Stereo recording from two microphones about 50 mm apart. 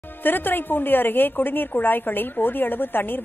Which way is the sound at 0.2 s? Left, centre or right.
Left.